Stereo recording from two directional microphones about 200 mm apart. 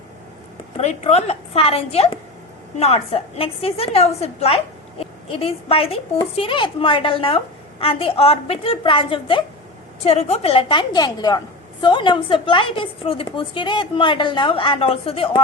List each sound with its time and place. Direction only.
0.8 s a woman's voice: 35° left (ahead or behind)